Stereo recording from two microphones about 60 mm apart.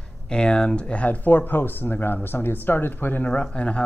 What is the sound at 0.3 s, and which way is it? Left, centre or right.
Speech, centre.